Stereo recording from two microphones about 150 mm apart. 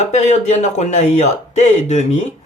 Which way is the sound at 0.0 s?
50° left (ahead or behind).